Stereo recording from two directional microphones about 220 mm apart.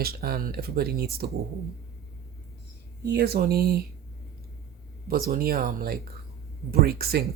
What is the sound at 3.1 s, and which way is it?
Speech, 45° right (ahead or behind).